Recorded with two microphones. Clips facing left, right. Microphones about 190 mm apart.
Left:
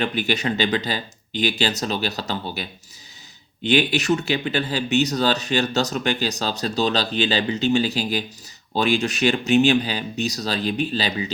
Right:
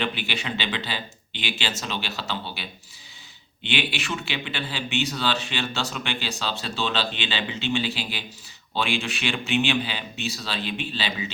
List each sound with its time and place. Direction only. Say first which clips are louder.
0.0 s speech: left 6 dB; 45° left (ahead or behind)